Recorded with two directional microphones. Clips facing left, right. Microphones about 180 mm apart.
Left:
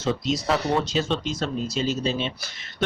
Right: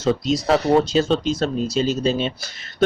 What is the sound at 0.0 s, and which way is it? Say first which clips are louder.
Speech: right 5 dB; 40° right (ahead or behind).